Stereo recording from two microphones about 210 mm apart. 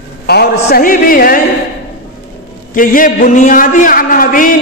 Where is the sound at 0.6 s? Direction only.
45° left (ahead or behind).